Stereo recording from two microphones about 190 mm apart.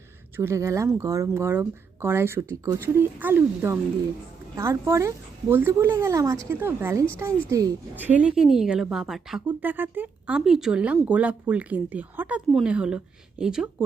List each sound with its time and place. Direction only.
0.3 s a woman's voice: 15° right (ahead or behind)